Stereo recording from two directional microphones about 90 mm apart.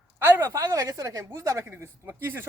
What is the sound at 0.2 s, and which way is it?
A woman's voice, 25° right (ahead or behind).